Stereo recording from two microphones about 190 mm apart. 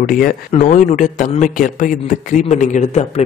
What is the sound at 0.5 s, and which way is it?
A man's voice, 40° left (ahead or behind).